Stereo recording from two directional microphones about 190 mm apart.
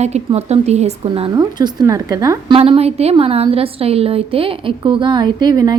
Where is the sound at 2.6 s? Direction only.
30° right (ahead or behind).